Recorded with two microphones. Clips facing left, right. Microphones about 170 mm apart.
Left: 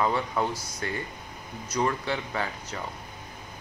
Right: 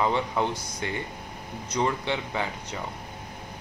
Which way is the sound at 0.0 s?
20° right (ahead or behind).